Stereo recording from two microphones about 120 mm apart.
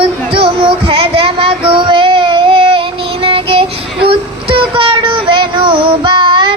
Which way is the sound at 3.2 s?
50° right (ahead or behind).